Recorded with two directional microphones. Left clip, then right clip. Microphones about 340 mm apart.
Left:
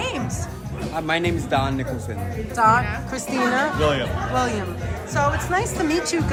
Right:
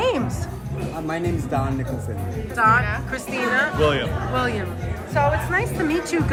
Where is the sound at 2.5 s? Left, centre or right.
Centre.